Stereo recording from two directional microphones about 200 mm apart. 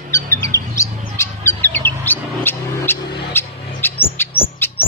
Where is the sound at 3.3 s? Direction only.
10° left (ahead or behind).